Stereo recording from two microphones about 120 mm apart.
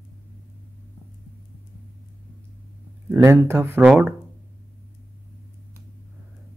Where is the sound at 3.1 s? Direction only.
20° right (ahead or behind).